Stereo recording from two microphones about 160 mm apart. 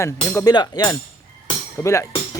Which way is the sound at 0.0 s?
15° left (ahead or behind).